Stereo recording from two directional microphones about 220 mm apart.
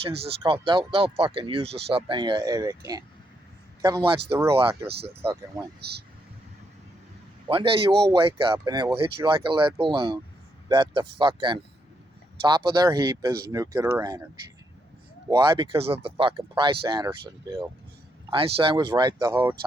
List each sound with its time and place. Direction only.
0.2 s speech: 25° right (ahead or behind)
7.4 s speech: 25° right (ahead or behind)
15.3 s speech: 20° right (ahead or behind)
18.3 s speech: 25° right (ahead or behind)